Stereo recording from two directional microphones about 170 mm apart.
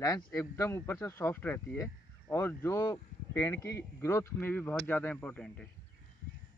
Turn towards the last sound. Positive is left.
turn(degrees=5)  # may be behind; listen again after turning